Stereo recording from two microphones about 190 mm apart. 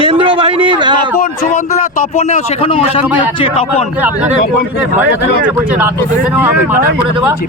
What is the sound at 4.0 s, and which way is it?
Speech, 10° right (ahead or behind).